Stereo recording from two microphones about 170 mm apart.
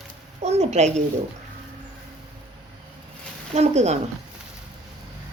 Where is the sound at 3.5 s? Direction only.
40° right (ahead or behind).